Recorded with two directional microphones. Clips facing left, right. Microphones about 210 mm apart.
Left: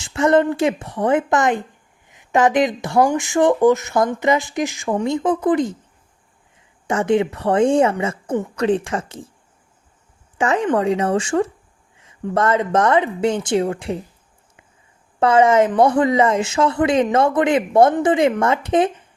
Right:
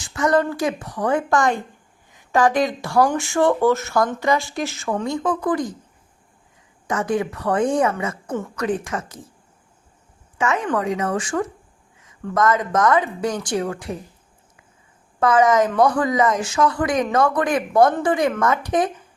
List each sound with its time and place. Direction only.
0.0 s speech: 25° left (ahead or behind)
6.8 s speech: 25° left (ahead or behind)
10.3 s a woman's voice: 30° left (ahead or behind)
15.2 s speech: 30° left (ahead or behind)